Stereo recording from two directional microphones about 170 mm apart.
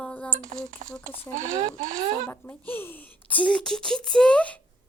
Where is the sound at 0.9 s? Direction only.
5° left (ahead or behind).